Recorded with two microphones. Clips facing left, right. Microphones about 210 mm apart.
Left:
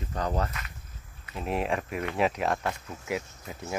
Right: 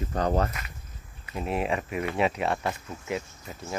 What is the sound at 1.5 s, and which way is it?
Speech, centre (ahead or behind).